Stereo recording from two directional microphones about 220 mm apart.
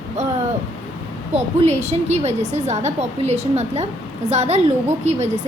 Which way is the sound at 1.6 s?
30° right (ahead or behind).